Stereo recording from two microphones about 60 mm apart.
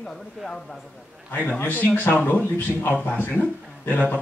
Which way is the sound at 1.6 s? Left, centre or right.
Left.